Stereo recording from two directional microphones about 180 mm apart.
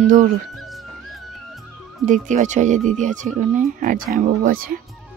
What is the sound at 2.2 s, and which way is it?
Speech, 40° right (ahead or behind).